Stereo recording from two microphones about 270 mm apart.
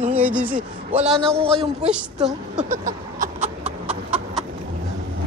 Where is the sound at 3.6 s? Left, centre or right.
Centre.